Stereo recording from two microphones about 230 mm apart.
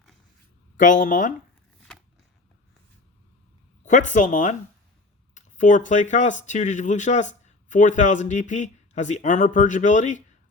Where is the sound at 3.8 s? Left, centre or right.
Left.